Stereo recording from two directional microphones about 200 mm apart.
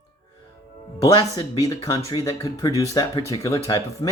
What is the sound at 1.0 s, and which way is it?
Speech, 20° left (ahead or behind).